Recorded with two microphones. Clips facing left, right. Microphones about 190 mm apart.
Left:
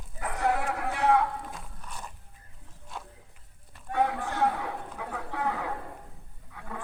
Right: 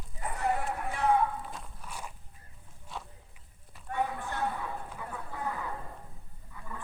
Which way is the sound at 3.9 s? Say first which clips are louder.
Left 5 dB; 85° left.